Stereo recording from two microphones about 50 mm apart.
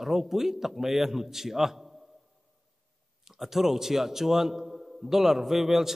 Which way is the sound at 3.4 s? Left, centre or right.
Centre.